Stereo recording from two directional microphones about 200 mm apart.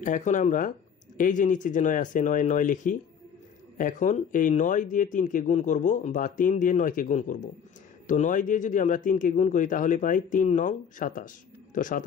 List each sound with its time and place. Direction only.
0.0 s speech: 40° left (ahead or behind)